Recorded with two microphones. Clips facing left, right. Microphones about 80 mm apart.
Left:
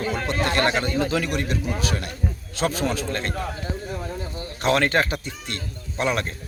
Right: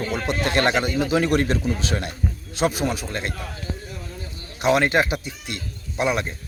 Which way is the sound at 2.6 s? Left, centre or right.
Centre.